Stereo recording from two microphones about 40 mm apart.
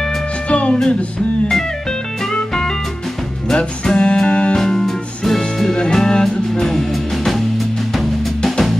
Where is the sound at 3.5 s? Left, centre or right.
Left.